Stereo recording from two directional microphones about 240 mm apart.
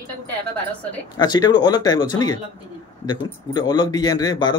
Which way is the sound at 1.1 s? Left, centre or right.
Centre.